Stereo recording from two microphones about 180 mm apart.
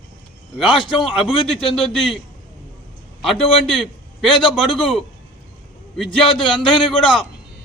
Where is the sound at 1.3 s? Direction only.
30° left (ahead or behind).